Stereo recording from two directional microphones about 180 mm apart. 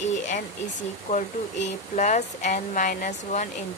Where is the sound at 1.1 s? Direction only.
45° left (ahead or behind).